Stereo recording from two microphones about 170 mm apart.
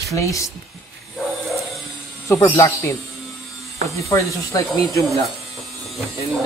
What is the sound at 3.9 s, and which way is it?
Speech, 20° left (ahead or behind).